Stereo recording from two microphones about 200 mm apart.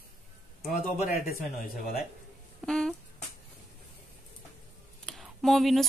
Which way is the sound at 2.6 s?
Centre (ahead or behind).